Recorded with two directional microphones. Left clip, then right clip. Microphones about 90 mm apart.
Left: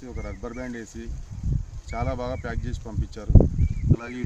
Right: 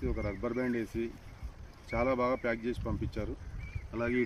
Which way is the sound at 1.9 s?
45° left (ahead or behind).